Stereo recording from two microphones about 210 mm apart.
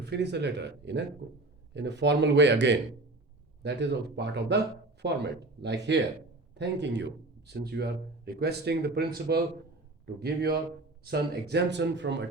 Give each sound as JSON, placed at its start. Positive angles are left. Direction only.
{"t": 0.0, "sound": "speech", "side_deg": -55}